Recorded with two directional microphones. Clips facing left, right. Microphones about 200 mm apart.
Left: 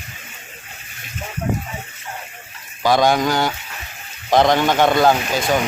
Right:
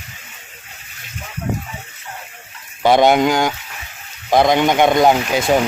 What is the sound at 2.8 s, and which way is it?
Speech, 20° right (ahead or behind).